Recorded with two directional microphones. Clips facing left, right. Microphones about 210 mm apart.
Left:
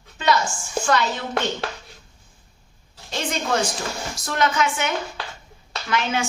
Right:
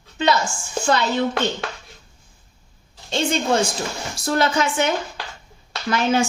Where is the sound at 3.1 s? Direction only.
25° right (ahead or behind).